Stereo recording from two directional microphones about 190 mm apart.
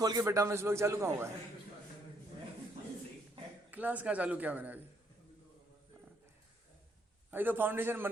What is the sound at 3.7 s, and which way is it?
A man's voice, 10° right (ahead or behind).